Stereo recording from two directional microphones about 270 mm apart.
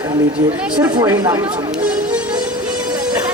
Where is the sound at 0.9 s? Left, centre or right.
Centre.